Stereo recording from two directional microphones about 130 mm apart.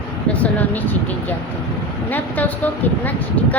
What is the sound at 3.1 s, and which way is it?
Speech, 10° left (ahead or behind).